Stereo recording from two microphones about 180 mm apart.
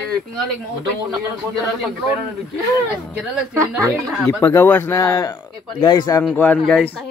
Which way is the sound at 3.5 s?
15° right (ahead or behind).